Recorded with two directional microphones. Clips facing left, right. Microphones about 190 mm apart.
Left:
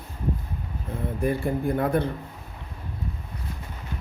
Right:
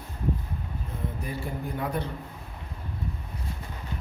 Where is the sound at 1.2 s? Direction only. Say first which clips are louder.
Left 13 dB; 55° left (ahead or behind).